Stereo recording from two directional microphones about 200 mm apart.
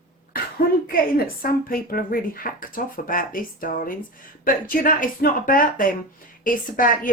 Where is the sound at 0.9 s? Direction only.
45° left (ahead or behind).